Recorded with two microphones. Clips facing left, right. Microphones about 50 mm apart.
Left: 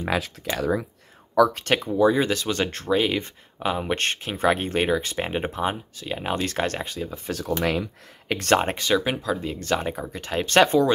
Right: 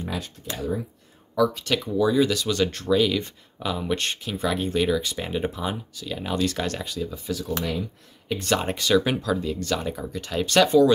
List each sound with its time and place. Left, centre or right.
0.0 s speech: left
1.3 s speech: left
1.9 s speech: left
7.6 s speech: left
8.5 s speech: left